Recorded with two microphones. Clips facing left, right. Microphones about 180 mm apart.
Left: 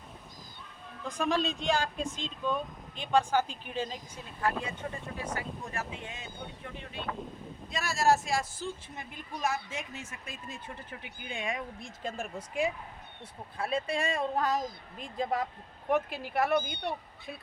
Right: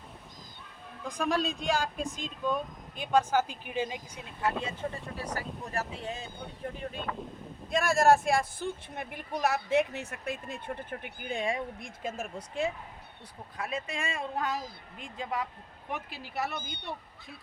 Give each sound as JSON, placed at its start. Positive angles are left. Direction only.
{"t": 1.0, "sound": "speech", "side_deg": 0}
{"t": 4.6, "sound": "speech", "side_deg": -30}
{"t": 12.0, "sound": "speech", "side_deg": 0}
{"t": 12.4, "sound": "speech", "side_deg": 15}
{"t": 13.6, "sound": "speech", "side_deg": 30}
{"t": 15.9, "sound": "speech", "side_deg": 50}